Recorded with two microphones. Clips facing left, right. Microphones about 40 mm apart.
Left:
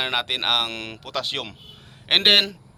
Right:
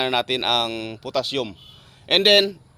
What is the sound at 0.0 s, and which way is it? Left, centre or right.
Speech, centre.